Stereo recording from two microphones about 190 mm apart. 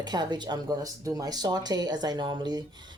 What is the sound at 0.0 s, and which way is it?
Speech, 20° right (ahead or behind).